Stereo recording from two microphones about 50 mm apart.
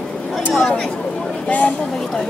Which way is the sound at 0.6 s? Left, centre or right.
Centre.